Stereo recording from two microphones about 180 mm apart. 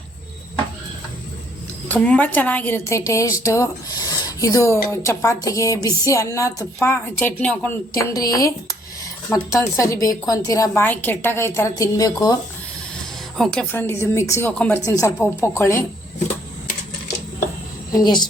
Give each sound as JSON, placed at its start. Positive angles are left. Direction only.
{"t": 1.9, "sound": "a woman's voice", "side_deg": 10}
{"t": 8.1, "sound": "a woman's voice", "side_deg": 20}
{"t": 13.3, "sound": "a woman's voice", "side_deg": 0}
{"t": 17.9, "sound": "speech", "side_deg": 25}